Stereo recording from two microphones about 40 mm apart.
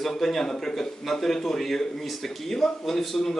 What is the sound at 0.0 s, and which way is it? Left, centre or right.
A man's voice, centre.